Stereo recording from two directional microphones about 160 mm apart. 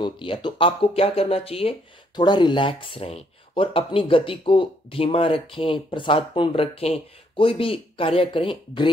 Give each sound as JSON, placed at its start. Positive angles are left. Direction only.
{"t": 0.0, "sound": "speech", "side_deg": 30}